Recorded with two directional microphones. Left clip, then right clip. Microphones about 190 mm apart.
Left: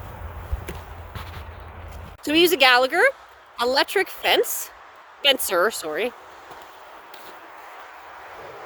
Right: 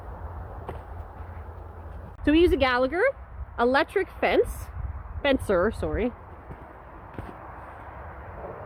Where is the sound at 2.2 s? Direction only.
40° left (ahead or behind).